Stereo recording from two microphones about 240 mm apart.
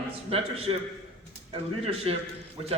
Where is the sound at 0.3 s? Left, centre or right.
Right.